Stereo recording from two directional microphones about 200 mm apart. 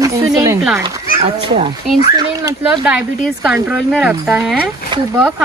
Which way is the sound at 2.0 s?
20° right (ahead or behind).